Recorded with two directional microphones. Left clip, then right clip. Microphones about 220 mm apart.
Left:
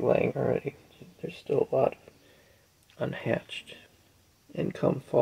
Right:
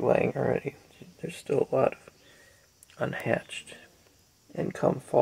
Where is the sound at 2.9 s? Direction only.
10° left (ahead or behind).